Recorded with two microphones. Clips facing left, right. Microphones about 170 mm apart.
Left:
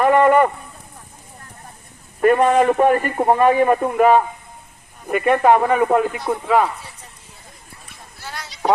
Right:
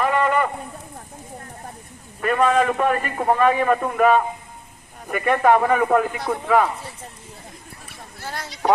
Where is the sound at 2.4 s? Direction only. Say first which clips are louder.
Right 1 dB; 40° left (ahead or behind).